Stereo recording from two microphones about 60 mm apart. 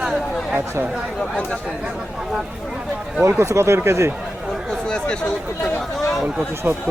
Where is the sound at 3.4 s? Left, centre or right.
Right.